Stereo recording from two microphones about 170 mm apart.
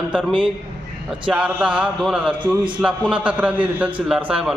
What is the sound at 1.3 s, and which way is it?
A man's voice, 5° right (ahead or behind).